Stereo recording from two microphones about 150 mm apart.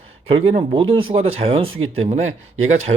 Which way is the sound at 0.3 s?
40° right (ahead or behind).